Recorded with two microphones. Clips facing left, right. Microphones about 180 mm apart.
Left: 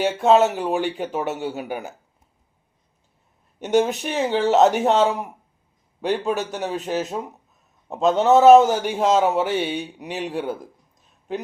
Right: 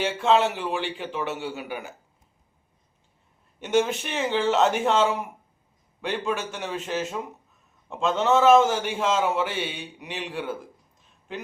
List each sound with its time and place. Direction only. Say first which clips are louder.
0.0 s a man's voice: left 5 dB; 40° left (ahead or behind)
3.6 s a man's voice: left 4 dB; 40° left (ahead or behind)